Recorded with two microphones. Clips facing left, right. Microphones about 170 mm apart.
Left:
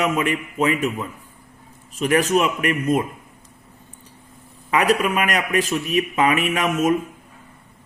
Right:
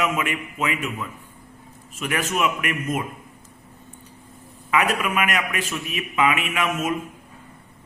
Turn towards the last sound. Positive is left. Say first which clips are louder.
# left 5 dB
turn(degrees=40)  # may be behind; listen again after turning